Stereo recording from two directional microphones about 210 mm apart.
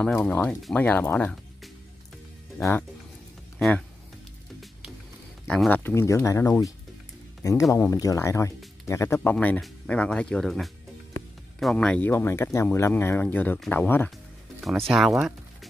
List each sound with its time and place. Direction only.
0.0 s speech: 5° left (ahead or behind)
5.5 s speech: 5° left (ahead or behind)
7.7 s speech: 15° left (ahead or behind)
14.9 s speech: centre (ahead or behind)